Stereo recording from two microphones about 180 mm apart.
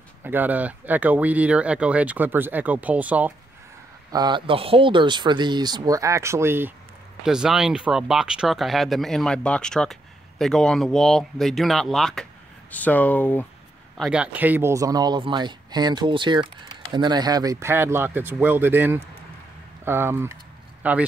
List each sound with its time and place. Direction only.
0.2 s speech: 10° right (ahead or behind)
4.1 s speech: 25° right (ahead or behind); by 13.5 s 10° left (ahead or behind)
13.9 s speech: 5° right (ahead or behind)